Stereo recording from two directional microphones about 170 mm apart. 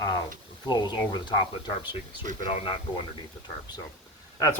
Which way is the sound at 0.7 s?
25° left (ahead or behind).